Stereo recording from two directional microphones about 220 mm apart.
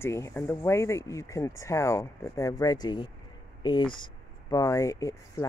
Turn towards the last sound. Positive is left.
turn(degrees=15)  # may be behind; listen again after turning